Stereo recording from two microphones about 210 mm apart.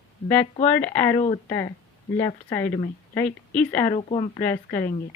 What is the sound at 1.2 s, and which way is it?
Speech, 30° left (ahead or behind).